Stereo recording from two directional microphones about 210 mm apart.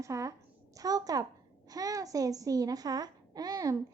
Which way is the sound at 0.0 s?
15° right (ahead or behind).